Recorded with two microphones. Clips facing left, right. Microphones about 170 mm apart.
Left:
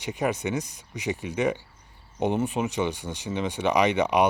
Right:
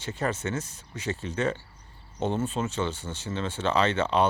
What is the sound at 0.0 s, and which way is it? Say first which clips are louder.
Speech: left 3 dB; 15° left (ahead or behind).